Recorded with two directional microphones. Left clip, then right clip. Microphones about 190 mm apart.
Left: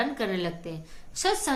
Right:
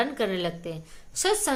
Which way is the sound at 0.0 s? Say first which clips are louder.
Right 2 dB; 20° right (ahead or behind).